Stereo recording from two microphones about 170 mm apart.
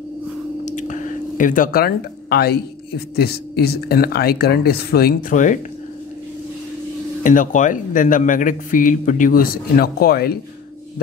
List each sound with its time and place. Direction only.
0.7 s a sound: 45° left (ahead or behind); by 2.6 s 70° left (ahead or behind)
3.2 s speech: 70° left (ahead or behind)
5.3 s a man's voice: 50° left (ahead or behind)
7.2 s a man's voice: 50° left (ahead or behind); by 10.3 s 65° left (ahead or behind)